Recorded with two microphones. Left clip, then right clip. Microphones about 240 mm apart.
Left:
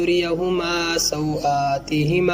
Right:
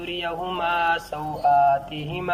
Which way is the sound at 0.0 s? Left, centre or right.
Left.